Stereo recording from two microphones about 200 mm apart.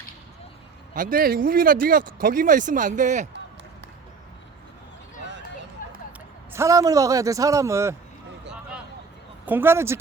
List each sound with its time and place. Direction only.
0.9 s speech: 45° right (ahead or behind)
5.8 s a sound: 45° left (ahead or behind)
6.5 s a man's voice: 15° right (ahead or behind)
9.5 s a man's voice: 10° right (ahead or behind)